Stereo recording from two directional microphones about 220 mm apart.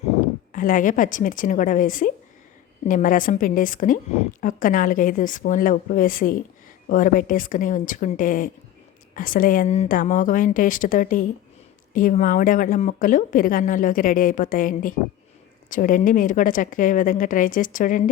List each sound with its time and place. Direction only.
0.5 s a woman's voice: 35° left (ahead or behind)